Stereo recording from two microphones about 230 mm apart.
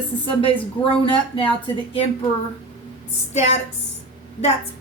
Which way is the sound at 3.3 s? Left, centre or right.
Left.